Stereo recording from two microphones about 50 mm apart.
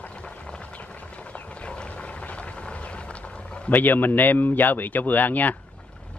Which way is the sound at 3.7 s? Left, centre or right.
Left.